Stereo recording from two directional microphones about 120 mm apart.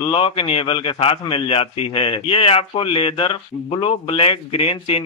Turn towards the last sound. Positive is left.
turn(degrees=50)  # may be behind; listen again after turning